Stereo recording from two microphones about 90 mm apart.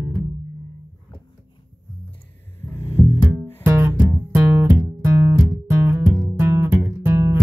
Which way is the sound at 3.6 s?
25° right (ahead or behind).